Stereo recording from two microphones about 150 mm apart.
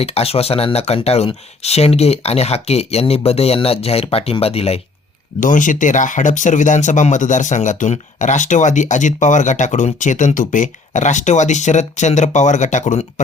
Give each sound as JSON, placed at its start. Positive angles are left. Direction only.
{"t": 0.0, "sound": "speech", "side_deg": 40}
{"t": 5.4, "sound": "speech", "side_deg": 60}